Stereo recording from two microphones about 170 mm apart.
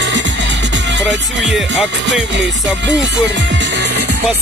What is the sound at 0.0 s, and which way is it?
Music, 90° right.